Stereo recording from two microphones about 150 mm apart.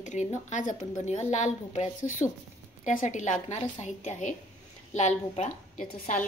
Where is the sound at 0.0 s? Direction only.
55° left (ahead or behind).